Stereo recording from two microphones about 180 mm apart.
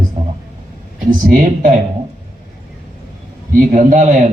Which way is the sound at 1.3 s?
45° right (ahead or behind).